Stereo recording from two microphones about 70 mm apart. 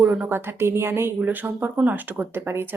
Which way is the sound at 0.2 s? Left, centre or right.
Right.